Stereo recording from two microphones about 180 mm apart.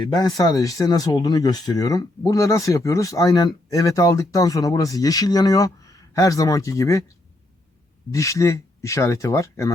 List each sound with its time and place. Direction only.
0.1 s speech: 20° left (ahead or behind)
8.1 s speech: 15° left (ahead or behind)